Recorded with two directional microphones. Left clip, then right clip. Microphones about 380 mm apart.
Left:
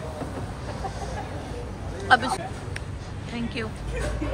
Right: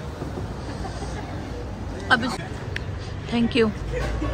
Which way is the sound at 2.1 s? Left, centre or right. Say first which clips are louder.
Left 1 dB; centre.